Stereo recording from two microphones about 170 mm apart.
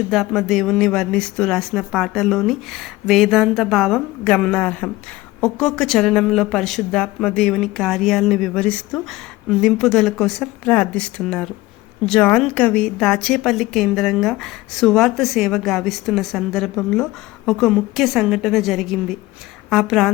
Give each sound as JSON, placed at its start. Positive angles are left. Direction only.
{"t": 0.1, "sound": "a woman's voice", "side_deg": 0}